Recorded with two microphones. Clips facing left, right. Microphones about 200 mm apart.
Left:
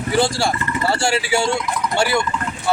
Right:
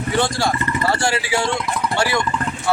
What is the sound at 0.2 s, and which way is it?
Speech, 25° left (ahead or behind).